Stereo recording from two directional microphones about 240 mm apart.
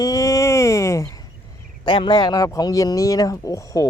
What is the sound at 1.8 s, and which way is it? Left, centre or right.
Speech, centre.